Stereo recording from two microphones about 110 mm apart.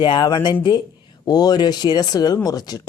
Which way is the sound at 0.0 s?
40° left (ahead or behind).